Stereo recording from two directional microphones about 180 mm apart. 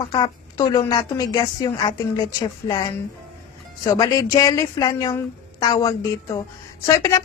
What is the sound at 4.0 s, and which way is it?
A woman's voice, 20° left (ahead or behind).